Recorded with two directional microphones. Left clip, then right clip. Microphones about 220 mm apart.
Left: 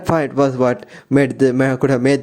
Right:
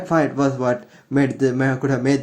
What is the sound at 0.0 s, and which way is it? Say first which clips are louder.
A man's voice: left 3 dB; 40° left (ahead or behind).